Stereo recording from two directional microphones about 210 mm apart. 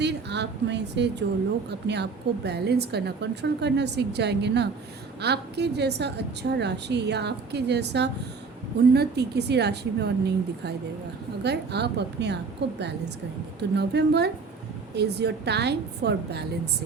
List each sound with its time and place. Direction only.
0.0 s a woman's voice: 55° right (ahead or behind)